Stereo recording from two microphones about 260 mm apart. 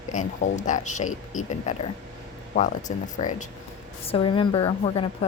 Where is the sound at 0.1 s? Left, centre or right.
Left.